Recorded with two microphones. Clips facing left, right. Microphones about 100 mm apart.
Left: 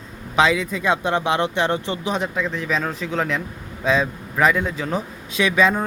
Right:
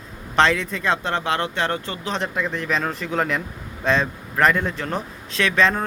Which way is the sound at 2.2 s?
Centre (ahead or behind).